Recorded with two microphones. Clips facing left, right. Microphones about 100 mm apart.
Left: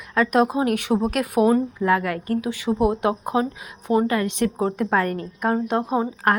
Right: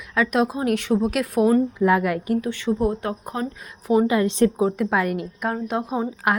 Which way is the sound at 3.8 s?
Centre (ahead or behind).